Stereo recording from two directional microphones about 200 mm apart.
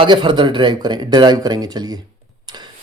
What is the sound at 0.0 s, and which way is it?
Speech, 25° right (ahead or behind).